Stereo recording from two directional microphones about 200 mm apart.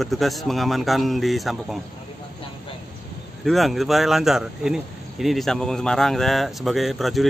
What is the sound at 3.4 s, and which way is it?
Speech, centre (ahead or behind).